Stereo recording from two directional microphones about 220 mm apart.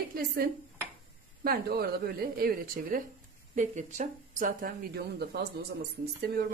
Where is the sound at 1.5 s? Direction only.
45° right (ahead or behind).